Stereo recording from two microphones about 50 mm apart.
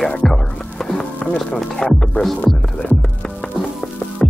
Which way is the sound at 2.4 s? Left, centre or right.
Left.